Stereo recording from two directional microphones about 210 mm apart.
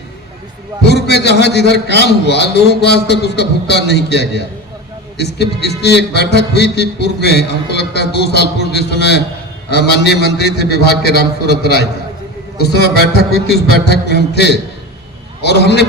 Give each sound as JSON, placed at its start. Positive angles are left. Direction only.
{"t": 0.8, "sound": "a man's voice", "side_deg": 50}